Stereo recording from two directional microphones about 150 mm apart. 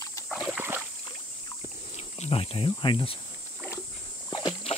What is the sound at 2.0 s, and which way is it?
Cricket, 45° left (ahead or behind).